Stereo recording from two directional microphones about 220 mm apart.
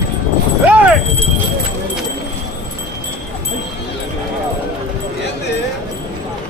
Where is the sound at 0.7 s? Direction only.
5° right (ahead or behind).